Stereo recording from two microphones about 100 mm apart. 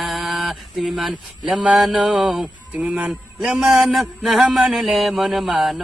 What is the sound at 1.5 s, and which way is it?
Speech, 10° right (ahead or behind).